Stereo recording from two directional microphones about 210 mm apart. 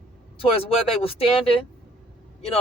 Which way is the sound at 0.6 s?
25° left (ahead or behind).